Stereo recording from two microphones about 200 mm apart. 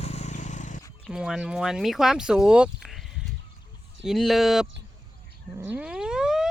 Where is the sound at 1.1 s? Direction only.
5° right (ahead or behind).